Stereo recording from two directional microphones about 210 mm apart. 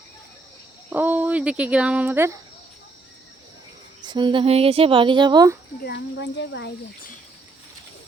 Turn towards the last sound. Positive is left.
turn(degrees=55)  # may be behind; listen again after turning